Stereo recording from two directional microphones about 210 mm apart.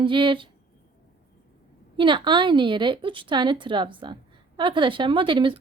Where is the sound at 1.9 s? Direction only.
20° right (ahead or behind).